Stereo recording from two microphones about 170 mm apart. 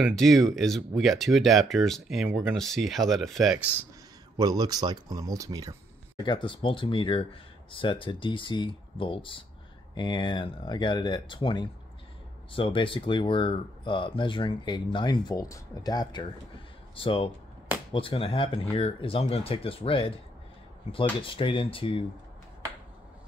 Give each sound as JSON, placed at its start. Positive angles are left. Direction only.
{"t": 0.1, "sound": "speech", "side_deg": 0}
{"t": 4.4, "sound": "speech", "side_deg": -20}
{"t": 6.1, "sound": "speech", "side_deg": 25}